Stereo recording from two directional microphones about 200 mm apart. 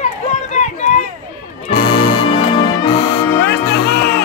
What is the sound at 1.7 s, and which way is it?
Music, 45° left (ahead or behind).